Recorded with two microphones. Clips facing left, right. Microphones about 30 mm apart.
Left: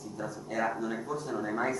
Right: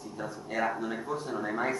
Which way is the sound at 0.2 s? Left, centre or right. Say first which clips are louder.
Right 1 dB; right.